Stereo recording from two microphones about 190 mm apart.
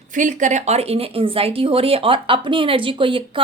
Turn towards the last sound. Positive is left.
turn(degrees=-25)  # may be behind; listen again after turning